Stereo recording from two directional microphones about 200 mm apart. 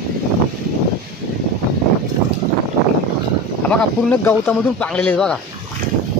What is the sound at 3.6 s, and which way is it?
Speech, 5° left (ahead or behind).